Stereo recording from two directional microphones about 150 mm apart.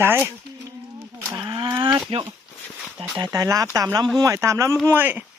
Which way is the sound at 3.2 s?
25° right (ahead or behind).